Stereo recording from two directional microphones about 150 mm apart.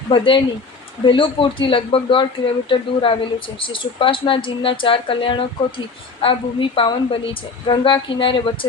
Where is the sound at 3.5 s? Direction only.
35° left (ahead or behind).